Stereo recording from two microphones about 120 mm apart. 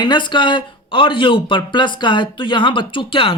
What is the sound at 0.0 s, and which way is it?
Speech, 40° left (ahead or behind).